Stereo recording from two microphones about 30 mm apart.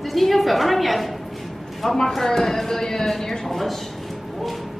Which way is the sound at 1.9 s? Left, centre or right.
Centre.